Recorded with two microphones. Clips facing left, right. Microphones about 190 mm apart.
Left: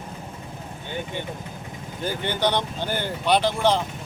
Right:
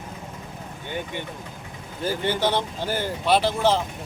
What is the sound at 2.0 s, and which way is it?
Speech, 5° right (ahead or behind).